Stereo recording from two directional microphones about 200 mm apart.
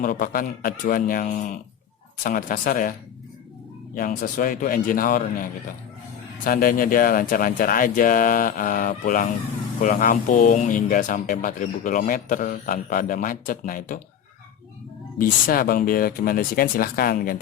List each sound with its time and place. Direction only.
0.0 s speech: 45° left (ahead or behind)
3.9 s speech: 45° left (ahead or behind)
15.2 s speech: 45° left (ahead or behind)